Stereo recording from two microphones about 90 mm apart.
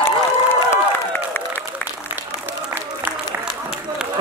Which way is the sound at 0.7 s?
25° left (ahead or behind).